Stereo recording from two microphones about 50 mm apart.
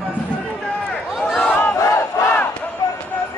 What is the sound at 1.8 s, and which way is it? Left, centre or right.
Battle cry, left.